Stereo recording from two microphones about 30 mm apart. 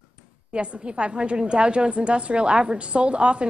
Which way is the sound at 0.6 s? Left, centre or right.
Right.